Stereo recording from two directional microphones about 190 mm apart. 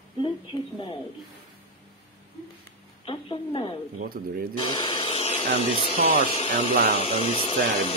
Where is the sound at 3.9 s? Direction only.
50° right (ahead or behind).